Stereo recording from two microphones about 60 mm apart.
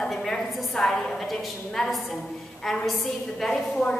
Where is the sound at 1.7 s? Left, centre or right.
Centre.